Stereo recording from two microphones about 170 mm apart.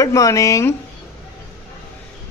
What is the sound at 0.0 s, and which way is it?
Speech, 20° left (ahead or behind).